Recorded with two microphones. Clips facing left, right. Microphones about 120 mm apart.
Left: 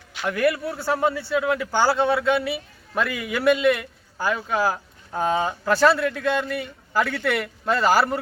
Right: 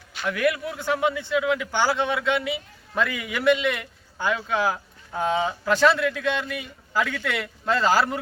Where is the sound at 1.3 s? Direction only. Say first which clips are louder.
Left 1 dB; 30° left (ahead or behind).